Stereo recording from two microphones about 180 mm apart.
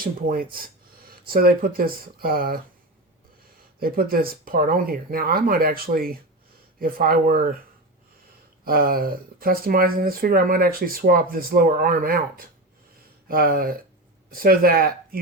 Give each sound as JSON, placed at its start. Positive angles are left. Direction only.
{"t": 0.0, "sound": "speech", "side_deg": -55}
{"t": 3.8, "sound": "speech", "side_deg": -55}
{"t": 8.6, "sound": "speech", "side_deg": -55}